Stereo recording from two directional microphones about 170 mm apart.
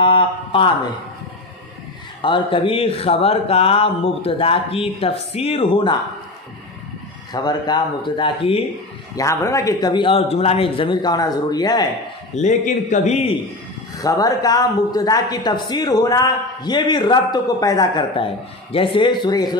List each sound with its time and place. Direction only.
0.0 s speech: 30° left (ahead or behind)
2.2 s speech: 30° left (ahead or behind)
7.3 s speech: 25° left (ahead or behind)
9.1 s speech: 20° left (ahead or behind)
12.4 s a man's voice: 45° left (ahead or behind)
13.9 s speech: 20° left (ahead or behind)